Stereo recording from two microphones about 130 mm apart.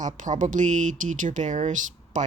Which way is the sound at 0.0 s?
75° right (ahead or behind).